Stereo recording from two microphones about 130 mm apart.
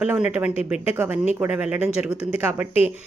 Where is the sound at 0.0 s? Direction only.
10° right (ahead or behind).